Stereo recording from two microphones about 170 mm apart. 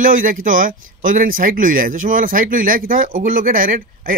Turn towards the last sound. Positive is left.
turn(degrees=-55)  # may be behind; listen again after turning